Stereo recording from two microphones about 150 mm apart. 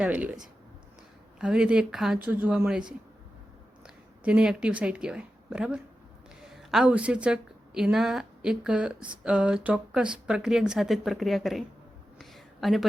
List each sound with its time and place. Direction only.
0.0 s speech: 10° right (ahead or behind)
1.4 s a woman's voice: 5° right (ahead or behind)
3.8 s a woman's voice: 5° right (ahead or behind)
12.2 s a sound: centre (ahead or behind)